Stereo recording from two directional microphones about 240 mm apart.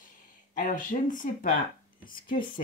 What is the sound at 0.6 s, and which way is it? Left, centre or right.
Speech, left.